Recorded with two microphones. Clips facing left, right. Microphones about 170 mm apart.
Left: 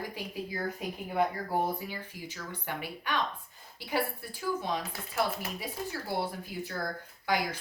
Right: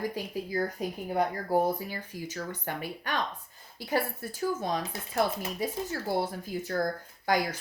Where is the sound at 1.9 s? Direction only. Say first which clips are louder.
Right 3 dB; 45° right (ahead or behind).